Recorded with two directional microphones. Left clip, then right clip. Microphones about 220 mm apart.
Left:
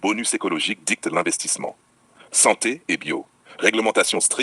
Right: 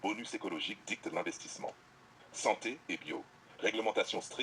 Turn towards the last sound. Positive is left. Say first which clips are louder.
# left 15 dB
turn(degrees=40)  # may be behind; listen again after turning